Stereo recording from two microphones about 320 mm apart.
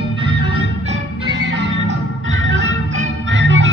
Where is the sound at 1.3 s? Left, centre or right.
Right.